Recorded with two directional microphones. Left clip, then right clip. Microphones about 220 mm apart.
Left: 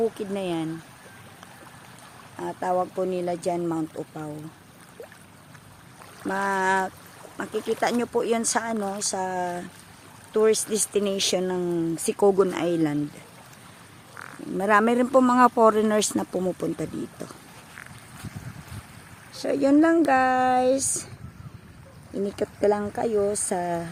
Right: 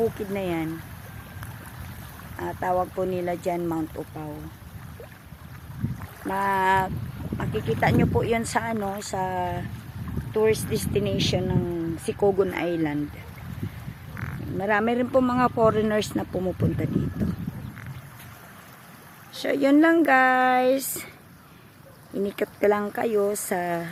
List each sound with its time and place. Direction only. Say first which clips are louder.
0.3 s speech: even; 10° left (ahead or behind)
2.4 s speech: even; 10° left (ahead or behind)
6.2 s speech: right 1 dB; 20° left (ahead or behind)
14.6 s speech: left 3 dB; 25° left (ahead or behind)
19.3 s speech: even; 15° left (ahead or behind)
22.2 s speech: right 1 dB; 10° left (ahead or behind)